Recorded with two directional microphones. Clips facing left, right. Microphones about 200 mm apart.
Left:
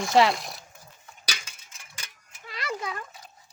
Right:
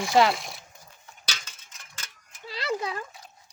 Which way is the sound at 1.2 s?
10° left (ahead or behind).